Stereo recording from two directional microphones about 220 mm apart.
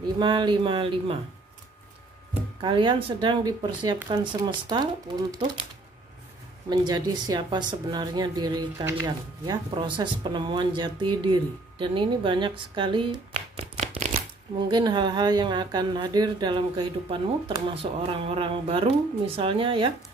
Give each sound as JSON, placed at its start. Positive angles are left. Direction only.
{"t": 0.2, "sound": "speech", "side_deg": -20}
{"t": 2.6, "sound": "speech", "side_deg": -20}
{"t": 6.7, "sound": "speech", "side_deg": -20}
{"t": 14.7, "sound": "speech", "side_deg": -20}